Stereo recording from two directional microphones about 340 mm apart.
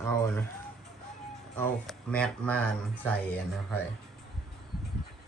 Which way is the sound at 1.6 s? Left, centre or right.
Centre.